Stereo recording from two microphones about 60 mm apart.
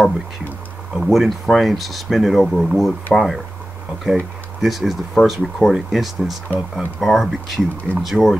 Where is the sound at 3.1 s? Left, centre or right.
Centre.